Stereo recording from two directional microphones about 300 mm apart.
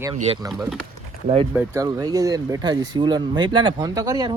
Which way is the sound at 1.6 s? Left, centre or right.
Centre.